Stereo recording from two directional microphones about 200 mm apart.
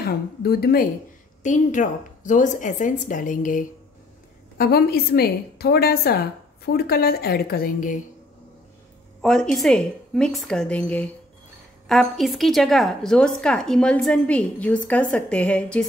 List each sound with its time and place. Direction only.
0.0 s a woman's voice: 50° left (ahead or behind)
1.4 s a woman's voice: 40° left (ahead or behind)
9.2 s a woman's voice: 5° left (ahead or behind)